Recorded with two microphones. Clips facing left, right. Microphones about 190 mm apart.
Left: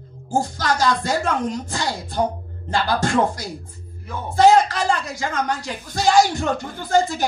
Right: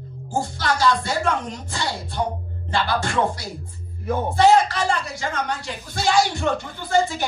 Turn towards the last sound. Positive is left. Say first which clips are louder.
# left 2 dB
turn(degrees=40)  # may be behind; listen again after turning